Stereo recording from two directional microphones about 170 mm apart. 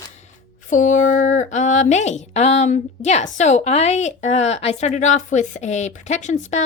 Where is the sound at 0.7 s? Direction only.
45° left (ahead or behind).